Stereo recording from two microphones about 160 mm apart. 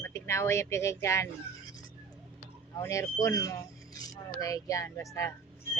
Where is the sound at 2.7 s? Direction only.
20° left (ahead or behind).